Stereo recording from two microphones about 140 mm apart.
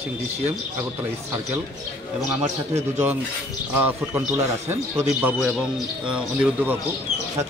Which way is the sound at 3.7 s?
15° right (ahead or behind).